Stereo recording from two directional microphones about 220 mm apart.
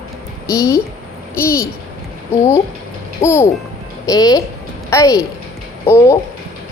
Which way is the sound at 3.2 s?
10° left (ahead or behind).